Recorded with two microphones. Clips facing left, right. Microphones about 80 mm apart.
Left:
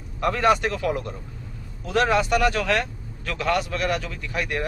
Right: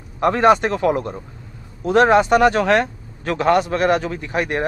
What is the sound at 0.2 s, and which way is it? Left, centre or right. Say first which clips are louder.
Speech: right 6 dB; right.